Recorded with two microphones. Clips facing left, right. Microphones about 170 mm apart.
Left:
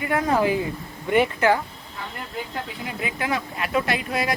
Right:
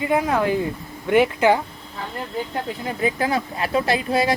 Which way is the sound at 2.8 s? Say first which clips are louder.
Right 7 dB; 35° right (ahead or behind).